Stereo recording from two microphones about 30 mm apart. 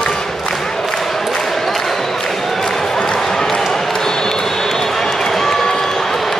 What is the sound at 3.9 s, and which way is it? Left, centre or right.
Basketball bounce, centre.